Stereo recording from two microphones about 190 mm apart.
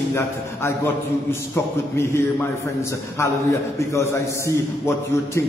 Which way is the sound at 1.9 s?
15° left (ahead or behind).